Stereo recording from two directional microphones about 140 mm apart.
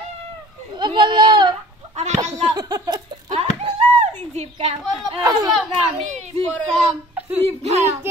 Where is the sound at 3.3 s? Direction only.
50° right (ahead or behind).